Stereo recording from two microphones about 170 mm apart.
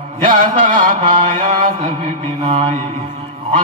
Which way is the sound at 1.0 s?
30° right (ahead or behind).